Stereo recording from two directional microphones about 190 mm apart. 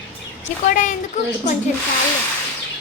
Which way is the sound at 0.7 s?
45° left (ahead or behind).